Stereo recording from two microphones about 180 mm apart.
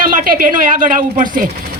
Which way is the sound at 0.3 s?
50° right (ahead or behind).